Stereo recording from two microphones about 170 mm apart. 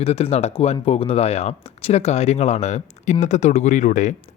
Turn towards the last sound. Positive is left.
turn(degrees=45)  # may be behind; listen again after turning